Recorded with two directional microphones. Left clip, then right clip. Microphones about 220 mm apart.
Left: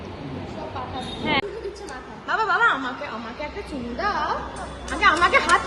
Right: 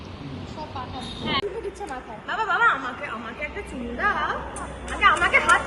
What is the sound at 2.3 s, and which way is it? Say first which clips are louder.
Speech: left 2 dB; 50° left (ahead or behind).